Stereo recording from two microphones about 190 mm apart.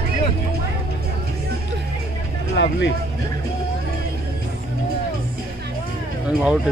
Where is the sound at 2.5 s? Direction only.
70° left (ahead or behind).